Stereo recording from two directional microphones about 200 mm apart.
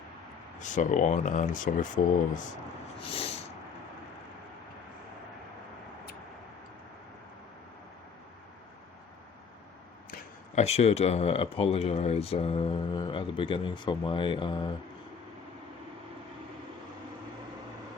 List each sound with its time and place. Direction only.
0.6 s speech: 40° left (ahead or behind)
3.0 s speech: 30° left (ahead or behind)
10.1 s speech: 35° left (ahead or behind)